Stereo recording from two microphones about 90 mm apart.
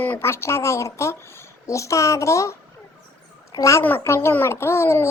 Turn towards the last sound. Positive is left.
turn(degrees=30)  # may be behind; listen again after turning